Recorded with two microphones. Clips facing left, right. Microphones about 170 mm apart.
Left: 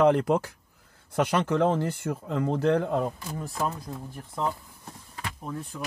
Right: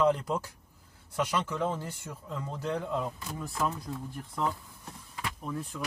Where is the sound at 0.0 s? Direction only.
70° left (ahead or behind).